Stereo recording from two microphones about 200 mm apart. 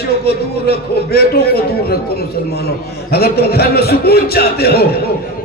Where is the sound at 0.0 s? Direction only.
55° left (ahead or behind).